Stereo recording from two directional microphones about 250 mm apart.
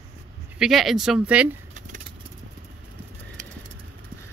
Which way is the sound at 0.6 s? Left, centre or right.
Centre.